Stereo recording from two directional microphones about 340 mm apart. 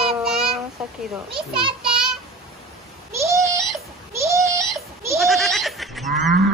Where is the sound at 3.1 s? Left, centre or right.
Centre.